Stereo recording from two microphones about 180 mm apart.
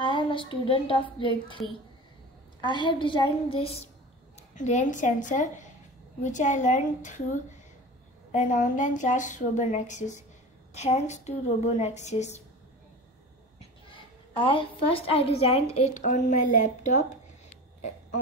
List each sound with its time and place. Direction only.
0.0 s a woman's voice: 25° left (ahead or behind)
2.8 s a woman's voice: 25° left (ahead or behind)
4.4 s a woman's voice: 40° left (ahead or behind)
8.3 s a woman's voice: 45° left (ahead or behind)
13.6 s a woman's voice: 30° left (ahead or behind)